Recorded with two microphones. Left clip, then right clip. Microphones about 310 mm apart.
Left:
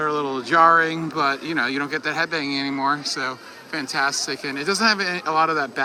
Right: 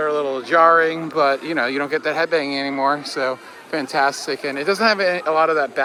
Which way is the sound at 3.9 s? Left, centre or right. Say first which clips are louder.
Right 3 dB; centre.